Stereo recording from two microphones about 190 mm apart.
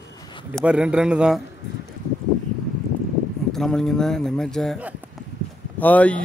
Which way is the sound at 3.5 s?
5° left (ahead or behind).